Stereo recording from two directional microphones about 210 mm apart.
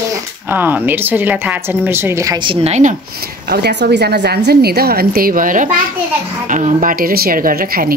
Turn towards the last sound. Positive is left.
turn(degrees=-45)  # may be behind; listen again after turning